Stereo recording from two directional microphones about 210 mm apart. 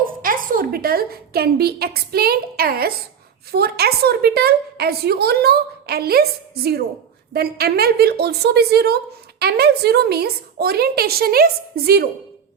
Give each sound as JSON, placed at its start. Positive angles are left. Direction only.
{"t": 0.0, "sound": "a woman's voice", "side_deg": -40}